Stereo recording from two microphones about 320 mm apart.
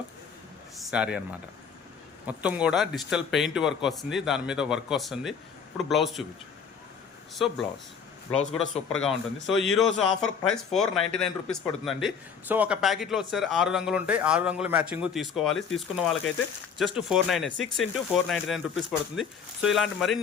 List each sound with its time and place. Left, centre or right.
0.8 s a man's voice: centre
7.4 s a man's voice: centre
8.3 s speech: centre
9.6 s a man's voice: centre